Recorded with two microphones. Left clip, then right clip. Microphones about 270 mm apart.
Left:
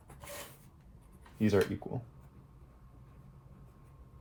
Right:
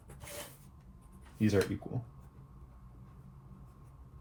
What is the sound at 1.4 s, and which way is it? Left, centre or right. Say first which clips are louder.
Speech: left 1 dB; left.